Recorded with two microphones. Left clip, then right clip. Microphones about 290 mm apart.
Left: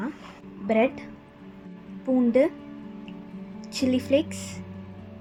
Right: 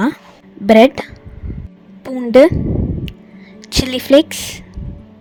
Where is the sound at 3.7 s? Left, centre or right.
Right.